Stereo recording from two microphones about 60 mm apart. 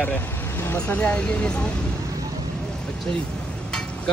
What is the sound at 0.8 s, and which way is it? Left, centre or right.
Speech, centre.